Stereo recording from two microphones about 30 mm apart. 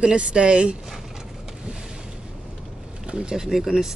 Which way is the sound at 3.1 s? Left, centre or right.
Right.